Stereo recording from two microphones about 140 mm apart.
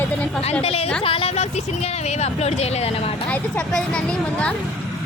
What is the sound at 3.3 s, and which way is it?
A woman's voice, 5° left (ahead or behind).